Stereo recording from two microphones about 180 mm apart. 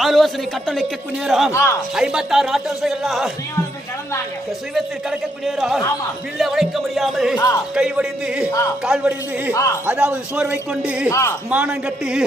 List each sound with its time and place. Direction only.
0.0 s a man's voice: centre (ahead or behind)
1.5 s a man's voice: 15° left (ahead or behind)
2.0 s a man's voice: 5° right (ahead or behind)
4.7 s a man's voice: centre (ahead or behind)
7.3 s speech: 20° left (ahead or behind)
7.8 s a man's voice: 5° right (ahead or behind)
9.5 s a man's voice: 15° left (ahead or behind)
9.8 s a man's voice: 5° right (ahead or behind)
11.1 s a man's voice: 15° left (ahead or behind)
11.4 s a man's voice: 5° right (ahead or behind)